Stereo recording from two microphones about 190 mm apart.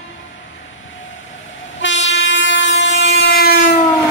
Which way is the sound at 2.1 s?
75° left (ahead or behind).